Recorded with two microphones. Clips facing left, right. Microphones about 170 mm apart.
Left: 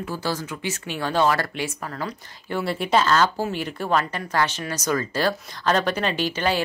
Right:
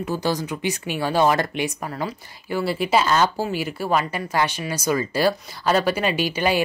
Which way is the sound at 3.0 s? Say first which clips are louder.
Right 1 dB; 15° right (ahead or behind).